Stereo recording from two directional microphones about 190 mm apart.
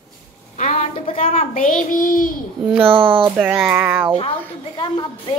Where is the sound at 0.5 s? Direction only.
35° left (ahead or behind).